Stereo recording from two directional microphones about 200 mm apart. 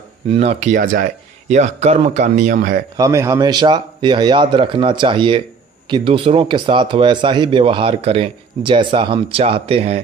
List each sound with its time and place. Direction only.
0.3 s speech: 35° right (ahead or behind)
3.0 s speech: 15° right (ahead or behind); by 10.0 s 30° right (ahead or behind)